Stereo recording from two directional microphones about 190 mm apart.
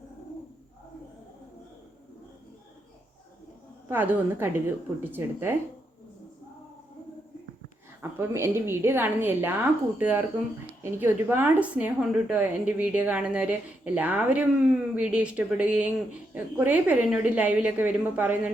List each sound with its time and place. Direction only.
3.8 s a woman's voice: 10° right (ahead or behind)
8.2 s a woman's voice: 15° right (ahead or behind)